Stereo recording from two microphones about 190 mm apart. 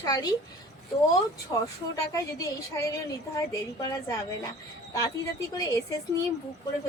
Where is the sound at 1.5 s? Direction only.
25° left (ahead or behind).